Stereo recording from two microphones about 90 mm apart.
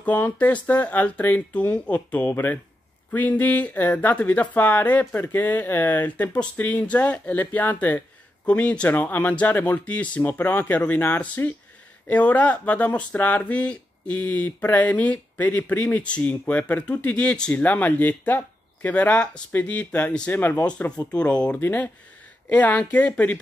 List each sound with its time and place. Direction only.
0.0 s speech: 20° left (ahead or behind)
21.5 s speech: 25° left (ahead or behind)